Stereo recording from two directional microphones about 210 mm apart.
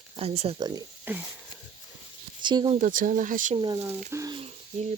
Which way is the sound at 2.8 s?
40° right (ahead or behind).